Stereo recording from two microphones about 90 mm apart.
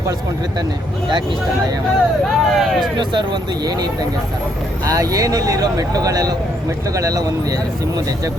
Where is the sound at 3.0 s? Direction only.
60° right (ahead or behind); by 8.3 s 45° right (ahead or behind).